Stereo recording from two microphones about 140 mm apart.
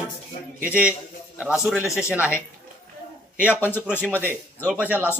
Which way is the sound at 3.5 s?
15° left (ahead or behind).